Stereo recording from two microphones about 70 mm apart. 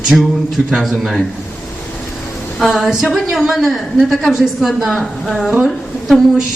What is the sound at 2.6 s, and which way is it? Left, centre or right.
A woman's voice, centre.